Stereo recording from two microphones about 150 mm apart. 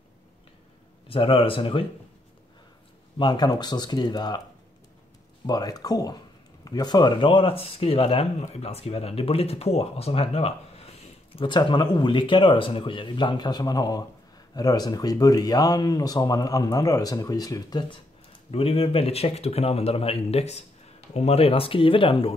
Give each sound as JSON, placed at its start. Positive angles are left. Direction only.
{"t": 1.0, "sound": "speech", "side_deg": 35}
{"t": 3.2, "sound": "speech", "side_deg": 30}
{"t": 5.5, "sound": "speech", "side_deg": 25}
{"t": 18.5, "sound": "speech", "side_deg": 40}